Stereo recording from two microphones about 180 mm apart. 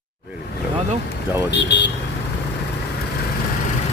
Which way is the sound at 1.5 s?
75° left (ahead or behind).